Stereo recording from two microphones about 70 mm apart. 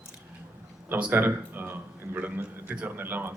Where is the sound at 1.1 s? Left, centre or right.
Right.